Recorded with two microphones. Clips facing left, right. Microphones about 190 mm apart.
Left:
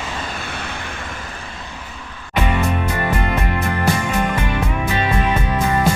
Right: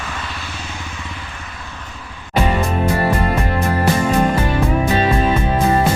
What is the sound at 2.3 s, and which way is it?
Music, 35° right (ahead or behind).